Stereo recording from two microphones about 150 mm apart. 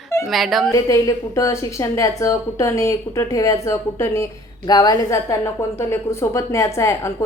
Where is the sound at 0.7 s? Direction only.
20° left (ahead or behind).